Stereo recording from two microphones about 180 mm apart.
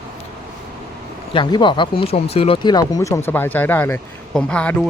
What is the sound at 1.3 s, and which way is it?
Speech, 25° left (ahead or behind).